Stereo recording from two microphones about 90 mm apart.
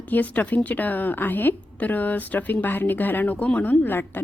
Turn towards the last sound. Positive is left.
turn(degrees=20)  # may be behind; listen again after turning